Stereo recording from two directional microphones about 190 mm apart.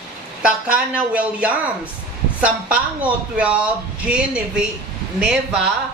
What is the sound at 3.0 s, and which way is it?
A man's voice, 5° right (ahead or behind).